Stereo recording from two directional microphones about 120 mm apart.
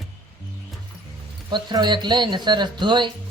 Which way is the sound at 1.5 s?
40° right (ahead or behind).